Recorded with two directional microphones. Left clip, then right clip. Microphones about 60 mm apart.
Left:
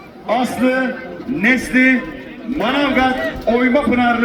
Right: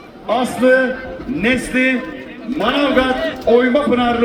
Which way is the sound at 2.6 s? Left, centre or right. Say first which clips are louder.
Right 1 dB; centre.